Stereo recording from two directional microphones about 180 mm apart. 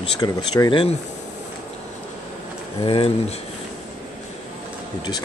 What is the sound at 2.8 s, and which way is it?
Speech, 30° left (ahead or behind).